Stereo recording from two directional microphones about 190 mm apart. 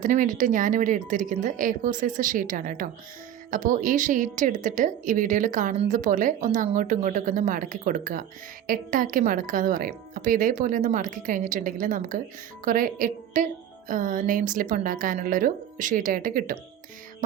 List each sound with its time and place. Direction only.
0.0 s speech: 45° right (ahead or behind)